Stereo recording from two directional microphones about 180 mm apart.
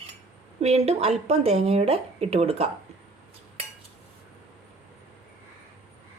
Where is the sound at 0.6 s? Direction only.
35° right (ahead or behind).